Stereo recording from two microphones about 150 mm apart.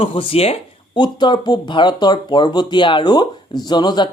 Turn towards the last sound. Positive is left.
turn(degrees=30)  # may be behind; listen again after turning